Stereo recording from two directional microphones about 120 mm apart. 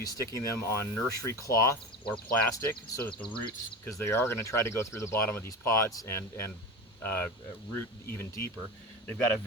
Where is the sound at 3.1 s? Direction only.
40° left (ahead or behind).